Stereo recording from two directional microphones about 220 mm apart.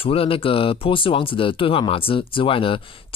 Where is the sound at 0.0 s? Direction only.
25° left (ahead or behind).